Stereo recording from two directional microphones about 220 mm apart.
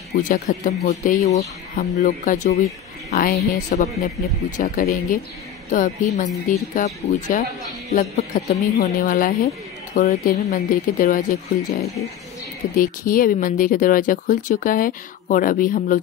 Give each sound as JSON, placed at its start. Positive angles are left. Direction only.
{"t": 0.2, "sound": "speech", "side_deg": 35}